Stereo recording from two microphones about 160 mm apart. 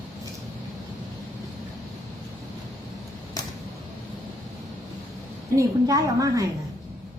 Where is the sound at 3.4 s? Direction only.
25° left (ahead or behind).